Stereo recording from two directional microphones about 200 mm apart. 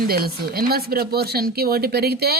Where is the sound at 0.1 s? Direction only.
50° right (ahead or behind).